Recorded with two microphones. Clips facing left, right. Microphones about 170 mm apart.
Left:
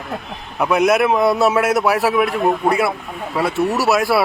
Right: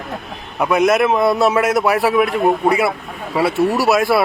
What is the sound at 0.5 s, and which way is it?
A man's voice, centre (ahead or behind).